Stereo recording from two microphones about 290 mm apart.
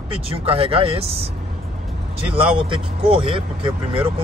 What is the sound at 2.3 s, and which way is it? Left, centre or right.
Speech, centre.